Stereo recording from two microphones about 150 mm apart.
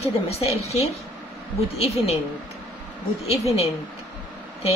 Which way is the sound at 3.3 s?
40° left (ahead or behind).